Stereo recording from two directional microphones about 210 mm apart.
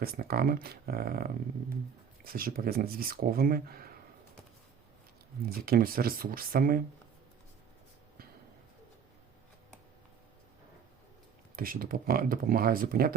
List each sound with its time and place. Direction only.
0.0 s speech: 45° right (ahead or behind)
5.4 s speech: 45° right (ahead or behind)
11.5 s speech: 45° right (ahead or behind)